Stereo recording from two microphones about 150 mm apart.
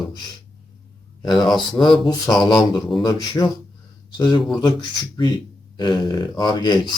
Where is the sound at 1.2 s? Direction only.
30° left (ahead or behind).